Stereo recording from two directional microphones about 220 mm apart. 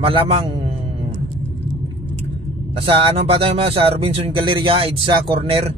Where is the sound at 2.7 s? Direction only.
25° right (ahead or behind).